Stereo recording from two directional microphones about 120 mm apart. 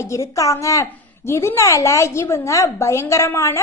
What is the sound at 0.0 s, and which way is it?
A woman's voice, 25° left (ahead or behind).